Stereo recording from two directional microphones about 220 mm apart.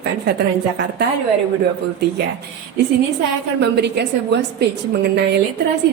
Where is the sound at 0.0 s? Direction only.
50° right (ahead or behind).